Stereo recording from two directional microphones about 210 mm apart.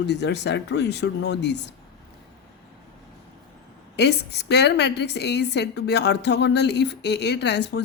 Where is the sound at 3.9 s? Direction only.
55° left (ahead or behind).